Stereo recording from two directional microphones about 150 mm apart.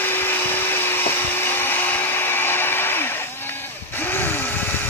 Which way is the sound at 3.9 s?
15° left (ahead or behind).